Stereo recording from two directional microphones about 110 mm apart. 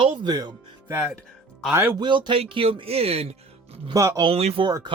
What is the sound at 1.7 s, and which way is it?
Speech, 20° right (ahead or behind).